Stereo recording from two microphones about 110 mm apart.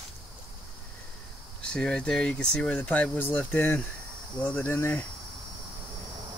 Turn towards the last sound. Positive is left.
turn(degrees=20)  # may be behind; listen again after turning